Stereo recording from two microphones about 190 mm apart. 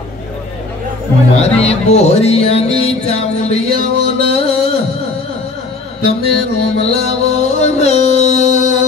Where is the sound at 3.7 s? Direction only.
30° left (ahead or behind).